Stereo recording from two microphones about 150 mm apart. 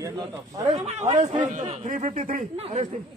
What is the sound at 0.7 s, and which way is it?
Speech, 50° right (ahead or behind).